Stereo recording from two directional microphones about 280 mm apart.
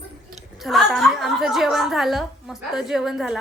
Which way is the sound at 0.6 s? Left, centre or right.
Centre.